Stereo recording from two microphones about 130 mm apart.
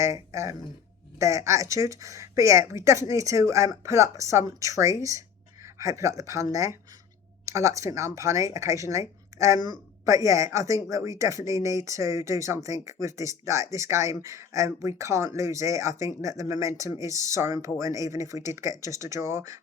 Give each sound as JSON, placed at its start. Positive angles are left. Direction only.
{"t": 0.0, "sound": "speech", "side_deg": -25}